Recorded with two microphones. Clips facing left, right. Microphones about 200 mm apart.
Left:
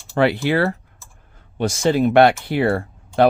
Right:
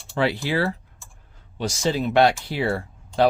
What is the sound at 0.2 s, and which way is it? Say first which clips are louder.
Speech: left 5 dB; 60° left (ahead or behind).